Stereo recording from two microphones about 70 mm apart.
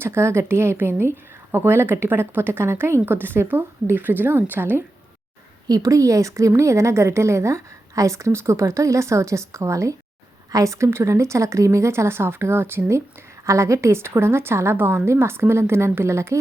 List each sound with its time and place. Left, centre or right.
0.0 s speech: right
5.6 s a woman's voice: right
13.4 s speech: right